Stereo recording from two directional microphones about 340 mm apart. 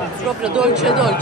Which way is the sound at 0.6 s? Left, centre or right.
Centre.